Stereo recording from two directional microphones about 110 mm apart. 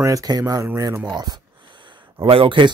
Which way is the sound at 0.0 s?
35° right (ahead or behind).